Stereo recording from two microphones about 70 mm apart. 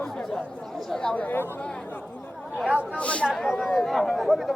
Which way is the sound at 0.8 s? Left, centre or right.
Centre.